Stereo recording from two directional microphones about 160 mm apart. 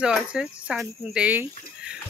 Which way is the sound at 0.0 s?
5° right (ahead or behind).